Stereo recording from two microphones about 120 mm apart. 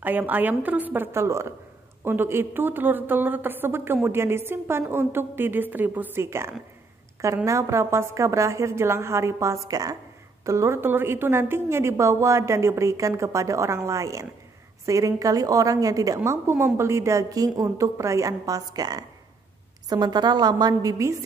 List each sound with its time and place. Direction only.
0.0 s a woman's voice: 15° right (ahead or behind)